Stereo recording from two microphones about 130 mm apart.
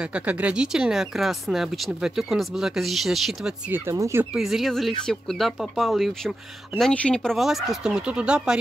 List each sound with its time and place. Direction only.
0.1 s speech: 10° right (ahead or behind)
3.7 s speech: 20° right (ahead or behind)
4.2 s speech: 5° right (ahead or behind)